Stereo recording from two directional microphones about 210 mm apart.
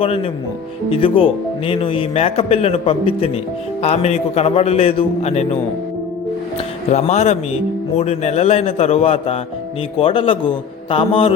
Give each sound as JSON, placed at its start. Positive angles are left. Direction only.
{"t": 0.0, "sound": "speech", "side_deg": 25}
{"t": 6.9, "sound": "speech", "side_deg": 30}